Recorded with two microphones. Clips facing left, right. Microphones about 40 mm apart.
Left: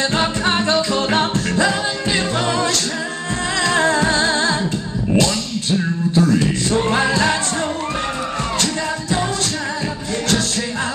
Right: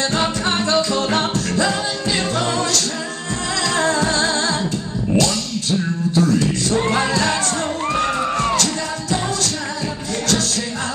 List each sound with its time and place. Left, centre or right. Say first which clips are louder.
0.0 s music: left 1 dB; left
7.9 s music: right 3 dB; right